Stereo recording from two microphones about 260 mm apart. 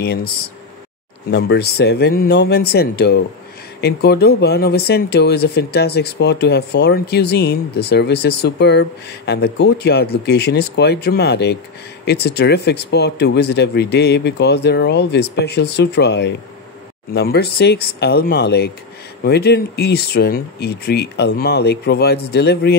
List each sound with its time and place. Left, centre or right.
0.0 s speech: left
1.3 s speech: left